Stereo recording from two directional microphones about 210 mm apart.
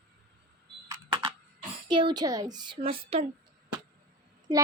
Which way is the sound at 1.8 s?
20° right (ahead or behind).